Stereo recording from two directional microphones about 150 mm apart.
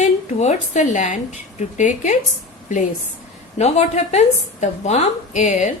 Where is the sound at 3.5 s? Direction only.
45° left (ahead or behind).